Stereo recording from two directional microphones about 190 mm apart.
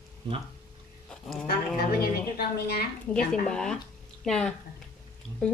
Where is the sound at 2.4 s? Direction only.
55° left (ahead or behind).